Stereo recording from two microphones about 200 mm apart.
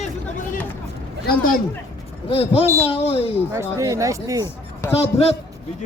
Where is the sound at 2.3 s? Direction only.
30° left (ahead or behind).